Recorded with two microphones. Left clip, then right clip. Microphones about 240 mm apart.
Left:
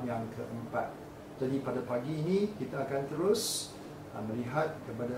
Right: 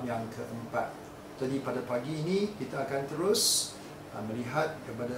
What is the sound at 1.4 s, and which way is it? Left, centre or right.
Speech, centre.